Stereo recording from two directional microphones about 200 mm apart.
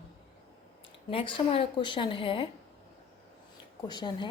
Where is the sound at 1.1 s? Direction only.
25° left (ahead or behind).